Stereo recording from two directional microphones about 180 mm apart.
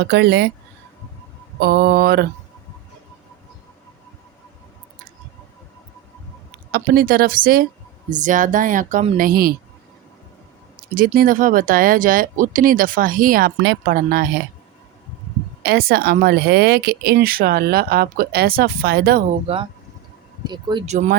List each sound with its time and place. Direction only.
0.0 s speech: 65° right (ahead or behind)
1.5 s speech: 55° right (ahead or behind)
6.7 s speech: 55° right (ahead or behind)
10.9 s speech: 50° right (ahead or behind)
15.6 s speech: 60° right (ahead or behind)
20.5 s speech: 25° right (ahead or behind)